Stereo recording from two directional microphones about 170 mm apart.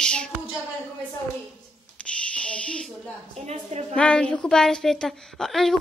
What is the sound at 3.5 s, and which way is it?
Speech, 40° right (ahead or behind).